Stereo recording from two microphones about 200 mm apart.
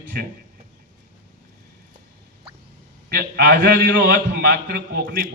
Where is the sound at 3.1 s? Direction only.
50° right (ahead or behind).